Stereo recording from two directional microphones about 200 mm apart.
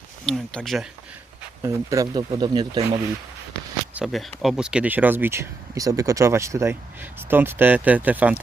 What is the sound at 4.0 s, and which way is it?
Speech, centre (ahead or behind).